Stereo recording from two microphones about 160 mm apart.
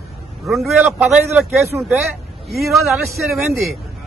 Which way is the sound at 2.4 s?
Centre (ahead or behind).